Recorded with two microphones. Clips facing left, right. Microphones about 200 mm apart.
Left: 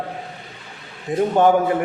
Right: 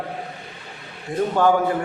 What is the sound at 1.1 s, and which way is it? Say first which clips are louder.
Speech: left 3 dB; 20° left (ahead or behind).